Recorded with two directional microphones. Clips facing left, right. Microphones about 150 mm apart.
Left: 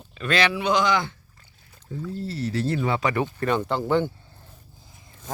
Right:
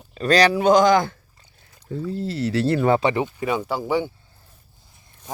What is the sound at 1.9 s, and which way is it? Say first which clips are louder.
Speech: right 5 dB; 75° right (ahead or behind).